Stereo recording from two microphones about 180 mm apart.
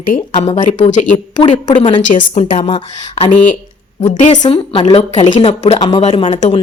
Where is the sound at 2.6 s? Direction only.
30° left (ahead or behind).